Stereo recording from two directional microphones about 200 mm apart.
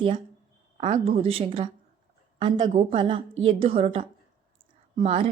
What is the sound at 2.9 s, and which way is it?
A woman's voice, 25° right (ahead or behind).